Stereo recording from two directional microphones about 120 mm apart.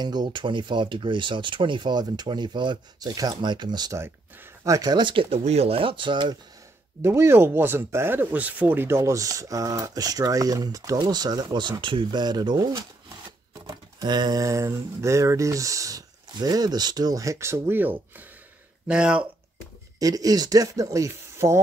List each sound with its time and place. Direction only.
0.0 s speech: 35° right (ahead or behind)
4.0 s speech: 25° right (ahead or behind); by 5.4 s 45° right (ahead or behind)
5.4 s speech: 60° right (ahead or behind); by 6.3 s 40° right (ahead or behind)
7.0 s speech: 20° right (ahead or behind)
13.9 s speech: 35° right (ahead or behind); by 19.2 s 10° right (ahead or behind)
20.0 s speech: 30° right (ahead or behind)